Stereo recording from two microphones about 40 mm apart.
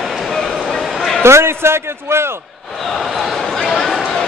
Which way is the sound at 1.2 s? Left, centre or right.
Right.